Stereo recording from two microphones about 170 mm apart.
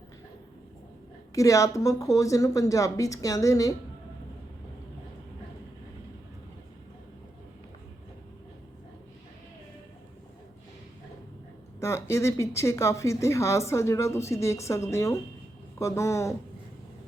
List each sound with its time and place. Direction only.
1.4 s a woman's voice: 20° left (ahead or behind)
11.8 s speech: 15° left (ahead or behind)